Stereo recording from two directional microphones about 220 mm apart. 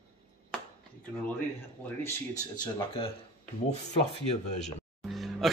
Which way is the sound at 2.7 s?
25° left (ahead or behind).